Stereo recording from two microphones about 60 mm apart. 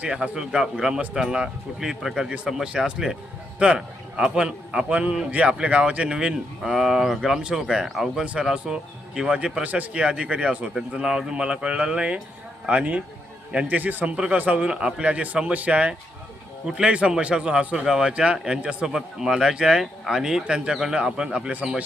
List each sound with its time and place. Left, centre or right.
0.0 s a man's voice: centre
8.2 s a man's voice: centre